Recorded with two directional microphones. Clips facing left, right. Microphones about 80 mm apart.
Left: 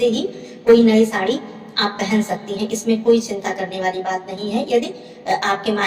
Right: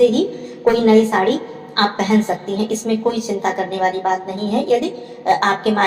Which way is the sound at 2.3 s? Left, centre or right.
Right.